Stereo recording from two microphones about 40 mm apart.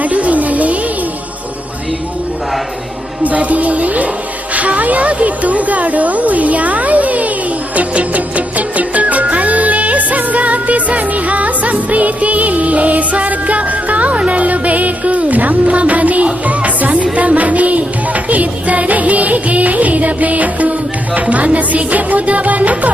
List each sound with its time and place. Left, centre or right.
0.0 s music: right
3.2 s music: right
4.5 s a woman's voice: right
7.8 s music: right